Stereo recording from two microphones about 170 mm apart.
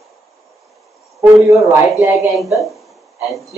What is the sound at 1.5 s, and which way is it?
Speech, 15° right (ahead or behind).